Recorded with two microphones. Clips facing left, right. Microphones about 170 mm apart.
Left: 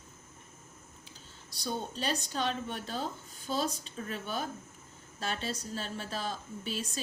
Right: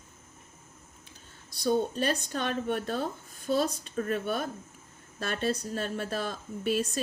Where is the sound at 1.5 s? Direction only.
55° right (ahead or behind).